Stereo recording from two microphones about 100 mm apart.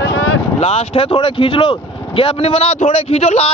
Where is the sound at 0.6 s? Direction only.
90° left.